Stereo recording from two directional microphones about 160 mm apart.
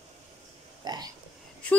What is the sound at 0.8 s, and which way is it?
Hiccup, 25° right (ahead or behind).